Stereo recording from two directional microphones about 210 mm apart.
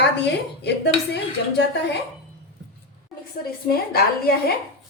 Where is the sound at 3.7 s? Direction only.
45° left (ahead or behind).